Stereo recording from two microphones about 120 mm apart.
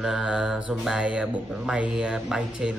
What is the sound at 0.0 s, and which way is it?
Speech, 5° right (ahead or behind).